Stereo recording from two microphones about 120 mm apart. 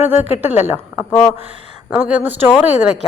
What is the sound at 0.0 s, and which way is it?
Speech, 70° left (ahead or behind).